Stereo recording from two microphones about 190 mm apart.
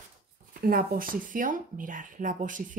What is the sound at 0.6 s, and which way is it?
Speech, 50° right (ahead or behind).